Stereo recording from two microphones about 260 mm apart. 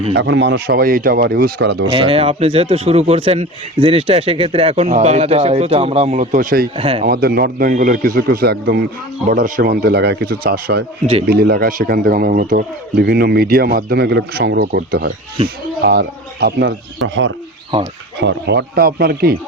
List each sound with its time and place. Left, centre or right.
0.1 s a man's voice: right
1.9 s a man's voice: right
6.7 s a man's voice: right
7.0 s a man's voice: right
11.0 s a man's voice: right
11.3 s a man's voice: right
18.2 s a man's voice: right